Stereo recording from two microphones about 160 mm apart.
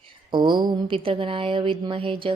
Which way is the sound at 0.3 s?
30° right (ahead or behind).